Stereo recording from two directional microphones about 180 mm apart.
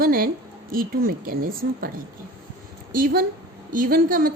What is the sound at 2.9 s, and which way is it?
A woman's voice, 50° right (ahead or behind).